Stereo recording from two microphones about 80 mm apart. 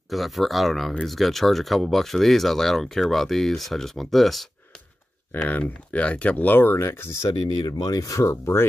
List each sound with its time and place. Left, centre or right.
0.1 s speech: centre
5.3 s speech: left
7.2 s speech: left